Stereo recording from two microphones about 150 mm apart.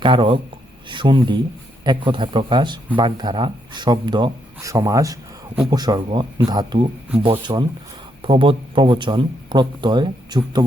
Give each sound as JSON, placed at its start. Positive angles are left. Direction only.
{"t": 0.0, "sound": "speech", "side_deg": -35}